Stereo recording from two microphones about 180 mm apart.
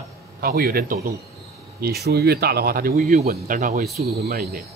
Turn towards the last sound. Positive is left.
turn(degrees=-55)  # may be behind; listen again after turning